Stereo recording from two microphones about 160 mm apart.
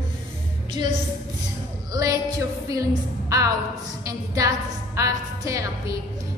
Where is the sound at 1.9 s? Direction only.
20° right (ahead or behind).